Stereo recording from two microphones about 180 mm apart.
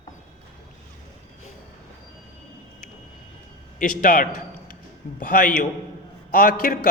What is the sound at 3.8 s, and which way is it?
A man's voice, 50° left (ahead or behind).